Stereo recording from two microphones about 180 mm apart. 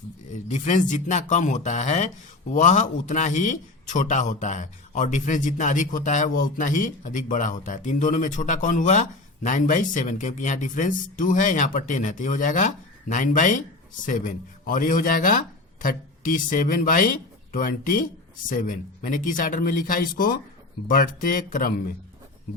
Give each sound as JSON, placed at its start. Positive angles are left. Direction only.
{"t": 0.4, "sound": "a man's voice", "side_deg": 40}